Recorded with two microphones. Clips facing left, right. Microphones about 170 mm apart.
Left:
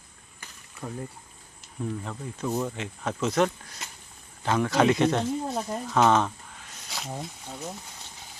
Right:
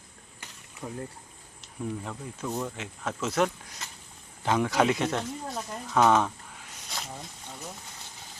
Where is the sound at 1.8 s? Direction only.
10° right (ahead or behind).